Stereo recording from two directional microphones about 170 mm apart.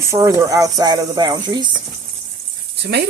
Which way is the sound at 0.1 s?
20° right (ahead or behind).